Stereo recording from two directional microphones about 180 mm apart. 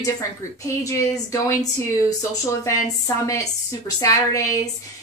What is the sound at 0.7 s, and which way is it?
Speech, 15° left (ahead or behind).